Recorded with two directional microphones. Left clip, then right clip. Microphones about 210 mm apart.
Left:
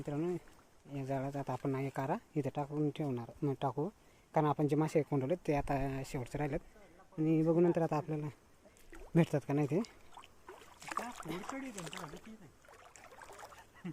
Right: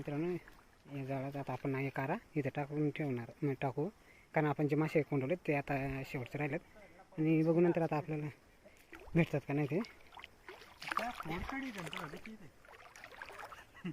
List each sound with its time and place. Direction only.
0.0 s speech: 15° left (ahead or behind)
10.2 s boat: 5° left (ahead or behind)
11.4 s speech: 5° left (ahead or behind)
13.2 s rowboat: 10° left (ahead or behind)